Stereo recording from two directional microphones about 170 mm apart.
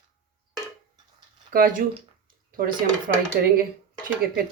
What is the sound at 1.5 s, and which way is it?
Speech, 55° right (ahead or behind).